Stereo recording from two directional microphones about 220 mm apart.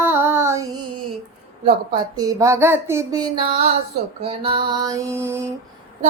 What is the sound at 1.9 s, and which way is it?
Music, 15° right (ahead or behind).